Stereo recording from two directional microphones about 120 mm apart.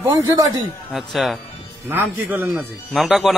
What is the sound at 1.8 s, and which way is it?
Speech, 15° right (ahead or behind).